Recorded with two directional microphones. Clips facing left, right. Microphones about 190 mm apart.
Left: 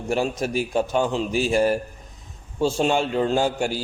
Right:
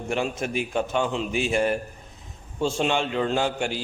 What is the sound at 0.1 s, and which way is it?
A man's voice, 35° left (ahead or behind).